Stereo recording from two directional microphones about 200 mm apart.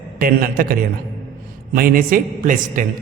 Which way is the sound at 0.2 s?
45° right (ahead or behind).